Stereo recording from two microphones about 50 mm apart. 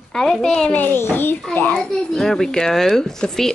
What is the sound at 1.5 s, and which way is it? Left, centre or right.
Speech, left.